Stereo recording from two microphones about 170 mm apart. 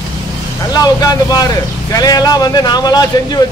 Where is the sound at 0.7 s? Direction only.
20° left (ahead or behind).